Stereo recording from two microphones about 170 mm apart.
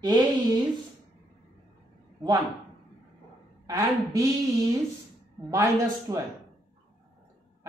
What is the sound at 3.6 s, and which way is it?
Speech, 20° right (ahead or behind).